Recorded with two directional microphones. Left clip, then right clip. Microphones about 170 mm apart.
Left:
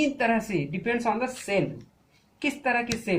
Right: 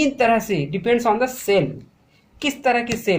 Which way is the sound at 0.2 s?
50° right (ahead or behind).